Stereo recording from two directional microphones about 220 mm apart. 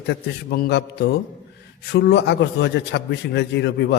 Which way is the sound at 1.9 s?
50° left (ahead or behind).